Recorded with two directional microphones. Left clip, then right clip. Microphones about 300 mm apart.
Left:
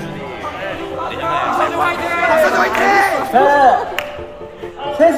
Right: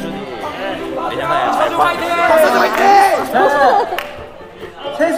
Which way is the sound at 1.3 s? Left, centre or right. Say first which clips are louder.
Right 2 dB; right.